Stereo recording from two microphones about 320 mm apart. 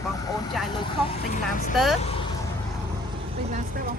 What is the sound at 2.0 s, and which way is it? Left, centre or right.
Speech, centre.